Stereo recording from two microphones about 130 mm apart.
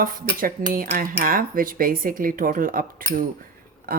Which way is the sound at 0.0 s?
90° right.